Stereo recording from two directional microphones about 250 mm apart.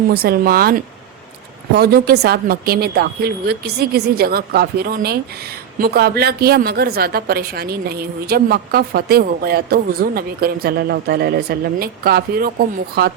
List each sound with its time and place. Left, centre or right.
0.1 s a woman's voice: right